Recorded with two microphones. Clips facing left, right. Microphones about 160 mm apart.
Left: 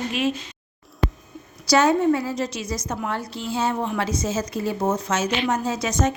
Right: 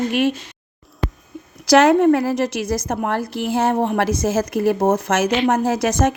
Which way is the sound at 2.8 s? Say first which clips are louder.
Right 6 dB; 55° right (ahead or behind).